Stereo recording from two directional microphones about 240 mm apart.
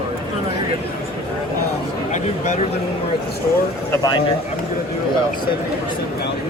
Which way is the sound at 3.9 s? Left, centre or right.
Centre.